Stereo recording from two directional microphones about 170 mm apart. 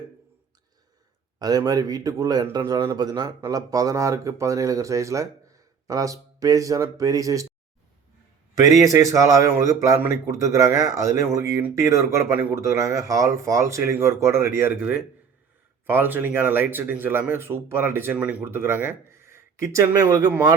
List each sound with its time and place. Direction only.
1.4 s speech: 20° right (ahead or behind)
8.5 s a man's voice: 20° right (ahead or behind)